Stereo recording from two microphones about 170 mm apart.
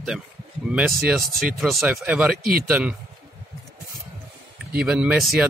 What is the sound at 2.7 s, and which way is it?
Speech, 5° right (ahead or behind).